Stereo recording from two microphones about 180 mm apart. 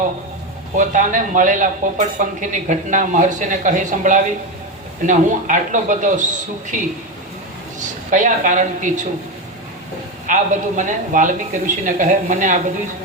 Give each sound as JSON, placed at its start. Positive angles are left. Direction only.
{"t": 0.8, "sound": "a man's voice", "side_deg": -45}
{"t": 10.2, "sound": "speech", "side_deg": -45}